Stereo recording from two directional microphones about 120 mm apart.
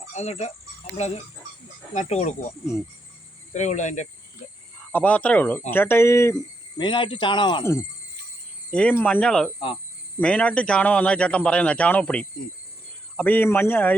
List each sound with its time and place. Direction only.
0.1 s speech: 65° left (ahead or behind)
1.9 s speech: 75° left (ahead or behind)
3.5 s speech: 80° left
4.9 s speech: 15° left (ahead or behind)
6.7 s speech: 40° left (ahead or behind)
7.6 s speech: 20° left (ahead or behind)
8.7 s speech: 10° left (ahead or behind)